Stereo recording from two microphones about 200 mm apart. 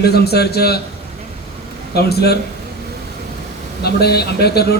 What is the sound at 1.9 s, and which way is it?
Speech, 55° left (ahead or behind).